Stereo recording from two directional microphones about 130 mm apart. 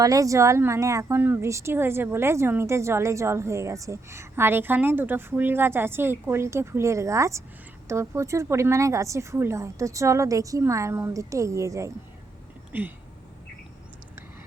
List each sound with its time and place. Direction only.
0.0 s speech: 25° right (ahead or behind)